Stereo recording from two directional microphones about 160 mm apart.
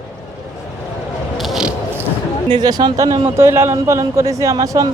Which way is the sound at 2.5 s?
25° right (ahead or behind).